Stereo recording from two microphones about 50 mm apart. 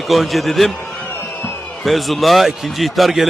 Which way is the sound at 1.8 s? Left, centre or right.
Centre.